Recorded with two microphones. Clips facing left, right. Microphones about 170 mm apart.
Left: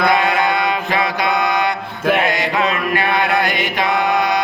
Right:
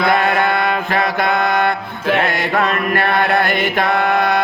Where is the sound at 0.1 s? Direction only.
55° right (ahead or behind).